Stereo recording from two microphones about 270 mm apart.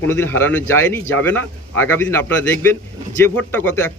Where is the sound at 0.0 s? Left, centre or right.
Centre.